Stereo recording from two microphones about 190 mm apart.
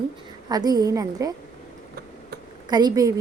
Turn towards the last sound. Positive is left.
turn(degrees=-20)  # may be behind; listen again after turning